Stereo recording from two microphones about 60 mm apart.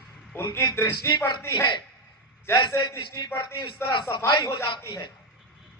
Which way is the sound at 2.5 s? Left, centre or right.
Left.